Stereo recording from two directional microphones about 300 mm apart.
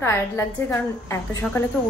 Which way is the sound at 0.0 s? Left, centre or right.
Centre.